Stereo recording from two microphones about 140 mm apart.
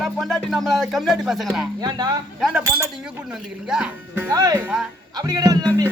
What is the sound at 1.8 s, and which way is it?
Speech, 30° right (ahead or behind).